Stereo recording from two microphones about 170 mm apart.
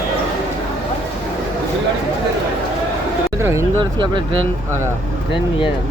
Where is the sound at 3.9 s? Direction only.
30° right (ahead or behind).